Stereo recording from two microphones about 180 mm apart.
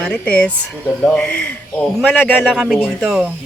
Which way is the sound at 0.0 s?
5° left (ahead or behind).